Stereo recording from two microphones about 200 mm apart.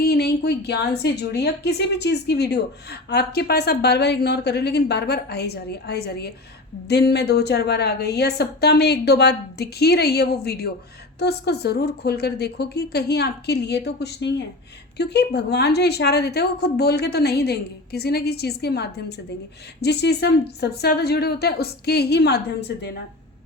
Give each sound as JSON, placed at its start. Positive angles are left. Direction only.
{"t": 0.0, "sound": "a woman's voice", "side_deg": 55}